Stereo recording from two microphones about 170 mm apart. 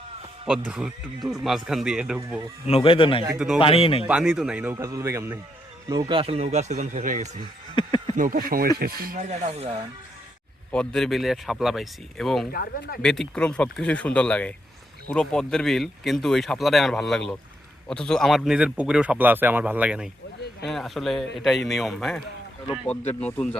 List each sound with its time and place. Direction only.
0.7 s speech: 5° right (ahead or behind)
2.6 s a man's voice: 35° left (ahead or behind)
3.3 s speech: centre (ahead or behind)
3.6 s a man's voice: 35° left (ahead or behind)
4.0 s speech: 5° right (ahead or behind)
5.9 s speech: 25° right (ahead or behind); by 7.4 s 45° right (ahead or behind)
7.8 s a sound: 25° left (ahead or behind)
8.1 s speech: 55° right (ahead or behind)
9.1 s speech: 40° right (ahead or behind)
10.7 s speech: 5° left (ahead or behind)
12.5 s speech: 60° left (ahead or behind)
13.0 s speech: 5° left (ahead or behind)